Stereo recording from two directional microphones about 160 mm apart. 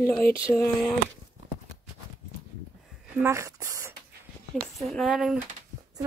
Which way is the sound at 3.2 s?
20° right (ahead or behind).